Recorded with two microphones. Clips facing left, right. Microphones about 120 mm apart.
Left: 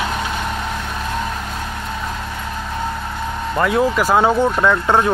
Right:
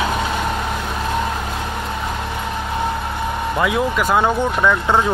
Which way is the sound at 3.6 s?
Centre (ahead or behind).